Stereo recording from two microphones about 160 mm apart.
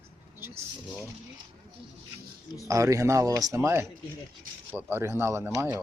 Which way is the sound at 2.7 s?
20° right (ahead or behind).